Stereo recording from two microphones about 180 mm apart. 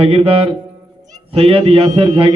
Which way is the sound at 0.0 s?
30° right (ahead or behind).